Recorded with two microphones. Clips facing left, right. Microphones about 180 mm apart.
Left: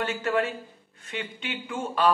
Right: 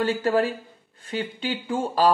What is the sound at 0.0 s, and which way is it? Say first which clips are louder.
Speech: right 5 dB; 35° right (ahead or behind).